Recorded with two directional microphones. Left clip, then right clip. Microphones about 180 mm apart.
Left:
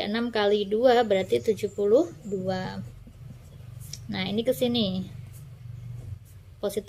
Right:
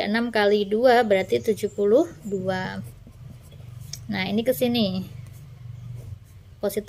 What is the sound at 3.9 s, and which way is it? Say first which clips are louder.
A woman's voice: right 4 dB; 15° right (ahead or behind).